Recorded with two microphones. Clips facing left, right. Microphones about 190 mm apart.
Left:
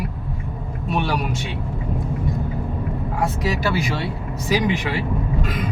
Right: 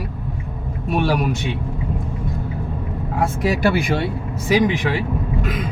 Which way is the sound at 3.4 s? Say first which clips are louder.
Right 7 dB; 55° right (ahead or behind).